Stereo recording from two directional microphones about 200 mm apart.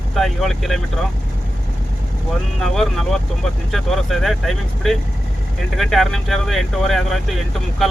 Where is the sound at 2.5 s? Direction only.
Centre (ahead or behind).